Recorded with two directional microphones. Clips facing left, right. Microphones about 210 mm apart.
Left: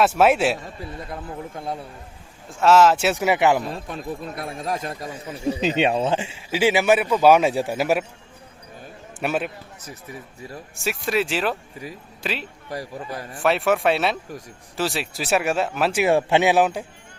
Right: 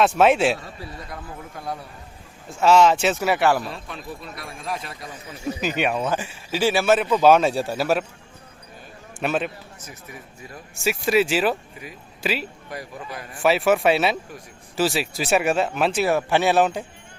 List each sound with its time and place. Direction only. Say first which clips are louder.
0.0 s speech: even; 5° left (ahead or behind)
1.1 s speech: left 4 dB; 25° left (ahead or behind)
2.6 s speech: even; centre (ahead or behind)
3.2 s speech: left 1 dB; 15° left (ahead or behind)
3.7 s speech: left 4 dB; 45° left (ahead or behind)
5.5 s speech: left 3 dB; 25° left (ahead or behind)
9.1 s a man's voice: even; 5° left (ahead or behind)
9.8 s speech: left 5 dB; 35° left (ahead or behind)
10.8 s speech: right 4 dB; centre (ahead or behind)
12.7 s speech: left 4 dB; 35° left (ahead or behind)
13.4 s speech: right 2 dB; centre (ahead or behind)
16.1 s speech: left 2 dB; 20° left (ahead or behind)